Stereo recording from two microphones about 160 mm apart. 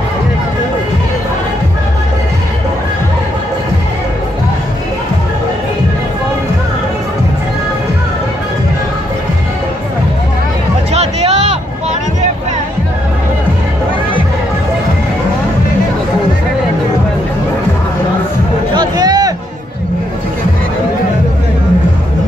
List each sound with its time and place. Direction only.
10.9 s music: 40° right (ahead or behind)
18.8 s music: 25° right (ahead or behind)